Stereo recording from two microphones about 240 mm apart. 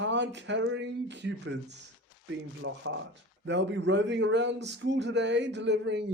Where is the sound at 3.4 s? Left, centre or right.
Right.